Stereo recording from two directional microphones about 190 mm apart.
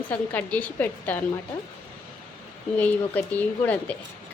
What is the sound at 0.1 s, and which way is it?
A woman's voice, 10° left (ahead or behind).